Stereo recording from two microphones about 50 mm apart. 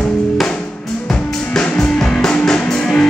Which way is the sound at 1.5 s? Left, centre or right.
Centre.